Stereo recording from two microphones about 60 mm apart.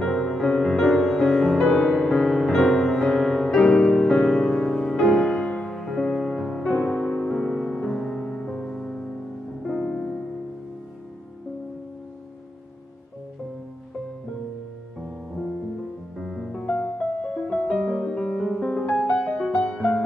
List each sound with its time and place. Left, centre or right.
0.0 s music: centre
5.9 s music: centre
6.2 s music: centre
16.2 s music: centre
16.6 s music: centre
19.6 s music: centre